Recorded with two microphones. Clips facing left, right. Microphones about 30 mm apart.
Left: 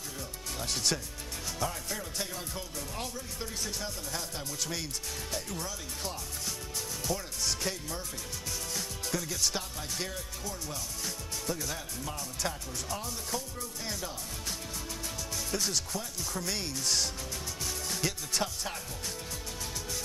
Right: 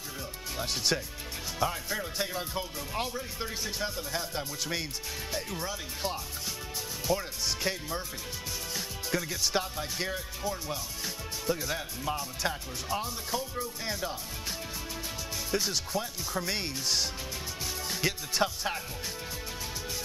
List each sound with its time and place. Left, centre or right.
0.6 s speech: centre
15.5 s speech: centre